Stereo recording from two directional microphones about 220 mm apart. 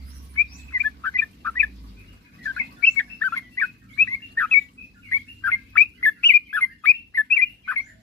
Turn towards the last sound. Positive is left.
turn(degrees=5)  # may be behind; listen again after turning